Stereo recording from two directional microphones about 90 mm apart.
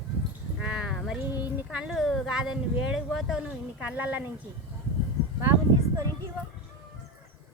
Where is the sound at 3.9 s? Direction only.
20° right (ahead or behind).